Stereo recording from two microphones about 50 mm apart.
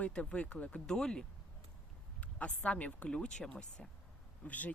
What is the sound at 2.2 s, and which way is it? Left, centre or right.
Speech, left.